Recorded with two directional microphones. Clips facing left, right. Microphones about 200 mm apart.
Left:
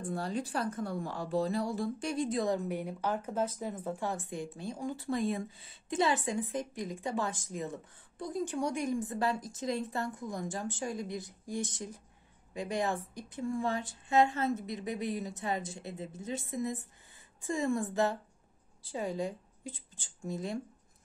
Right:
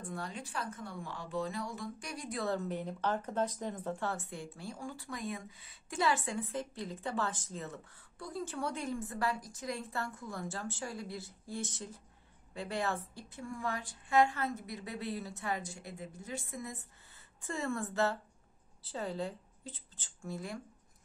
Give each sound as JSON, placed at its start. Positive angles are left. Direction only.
{"t": 0.1, "sound": "a woman's voice", "side_deg": 35}